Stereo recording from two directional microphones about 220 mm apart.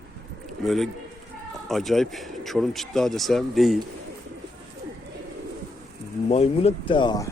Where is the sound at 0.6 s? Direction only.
Centre (ahead or behind).